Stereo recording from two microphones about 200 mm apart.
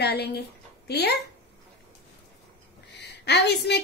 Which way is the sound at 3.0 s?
55° left (ahead or behind).